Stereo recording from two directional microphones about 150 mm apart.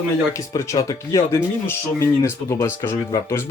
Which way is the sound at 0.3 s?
20° left (ahead or behind).